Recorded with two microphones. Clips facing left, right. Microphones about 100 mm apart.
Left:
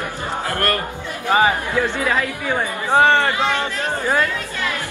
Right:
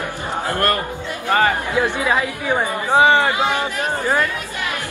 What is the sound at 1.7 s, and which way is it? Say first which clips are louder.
Speech: right 1 dB; 15° right (ahead or behind).